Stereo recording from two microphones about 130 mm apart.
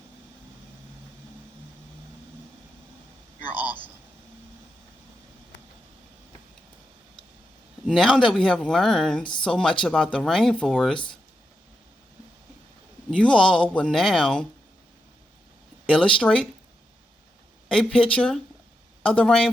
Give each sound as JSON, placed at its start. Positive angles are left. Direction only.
{"t": 3.4, "sound": "a sound", "side_deg": -15}
{"t": 7.9, "sound": "speech", "side_deg": 5}
{"t": 13.1, "sound": "speech", "side_deg": 5}
{"t": 15.9, "sound": "speech", "side_deg": 5}
{"t": 17.7, "sound": "speech", "side_deg": 5}